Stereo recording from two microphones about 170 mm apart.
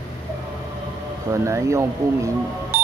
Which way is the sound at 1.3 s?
15° right (ahead or behind).